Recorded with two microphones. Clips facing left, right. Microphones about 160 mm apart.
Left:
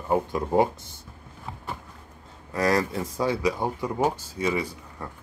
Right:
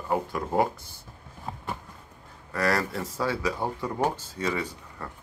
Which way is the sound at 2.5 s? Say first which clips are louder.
Left 3 dB; 20° left (ahead or behind).